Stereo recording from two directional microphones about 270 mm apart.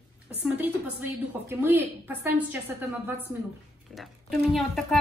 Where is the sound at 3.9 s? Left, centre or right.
Centre.